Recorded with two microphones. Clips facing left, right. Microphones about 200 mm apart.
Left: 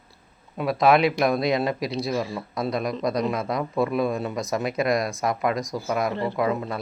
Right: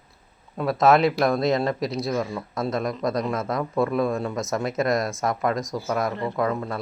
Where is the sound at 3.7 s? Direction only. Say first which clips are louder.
Right 1 dB; centre (ahead or behind).